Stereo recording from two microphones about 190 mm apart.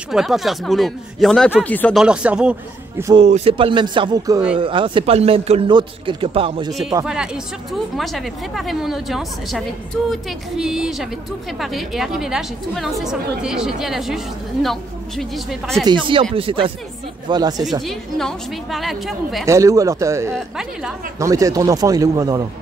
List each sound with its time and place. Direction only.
0.1 s a woman's voice: centre (ahead or behind)
2.0 s a woman's voice: 5° right (ahead or behind)
3.2 s speech: 35° right (ahead or behind)
6.7 s a woman's voice: centre (ahead or behind)
15.8 s speech: 25° right (ahead or behind)
17.8 s a woman's voice: centre (ahead or behind)
19.4 s speech: 15° right (ahead or behind)
20.3 s a woman's voice: 5° right (ahead or behind)
21.2 s speech: 15° right (ahead or behind)